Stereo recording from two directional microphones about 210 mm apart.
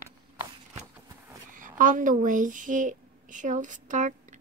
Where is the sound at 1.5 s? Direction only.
40° right (ahead or behind).